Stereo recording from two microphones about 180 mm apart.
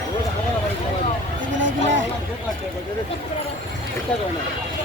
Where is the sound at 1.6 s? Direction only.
90° right.